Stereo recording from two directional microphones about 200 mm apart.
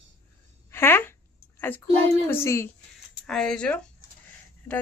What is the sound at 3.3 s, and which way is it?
Speech, 5° left (ahead or behind).